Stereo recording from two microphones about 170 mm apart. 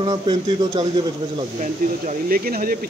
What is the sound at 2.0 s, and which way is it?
Speech, 55° right (ahead or behind).